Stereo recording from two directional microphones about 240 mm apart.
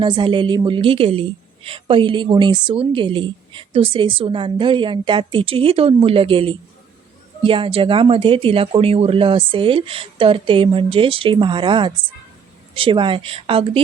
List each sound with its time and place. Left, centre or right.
0.0 s a woman's voice: centre